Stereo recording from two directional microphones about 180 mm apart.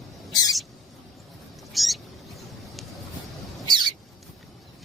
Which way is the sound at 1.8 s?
Centre (ahead or behind).